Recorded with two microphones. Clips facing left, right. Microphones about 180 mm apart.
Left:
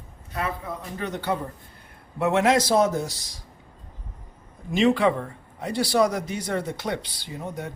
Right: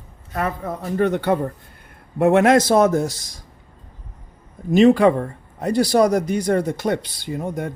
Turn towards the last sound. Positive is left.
turn(degrees=-50)  # may be behind; listen again after turning